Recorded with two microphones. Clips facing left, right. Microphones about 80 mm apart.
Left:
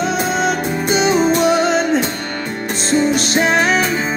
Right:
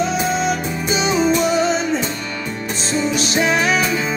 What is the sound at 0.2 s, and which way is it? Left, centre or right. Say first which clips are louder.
Music: left 2 dB; left.